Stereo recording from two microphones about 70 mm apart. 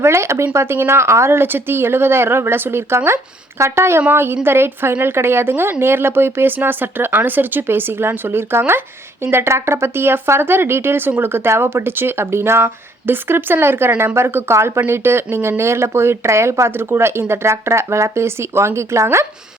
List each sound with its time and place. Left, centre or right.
0.0 s speech: right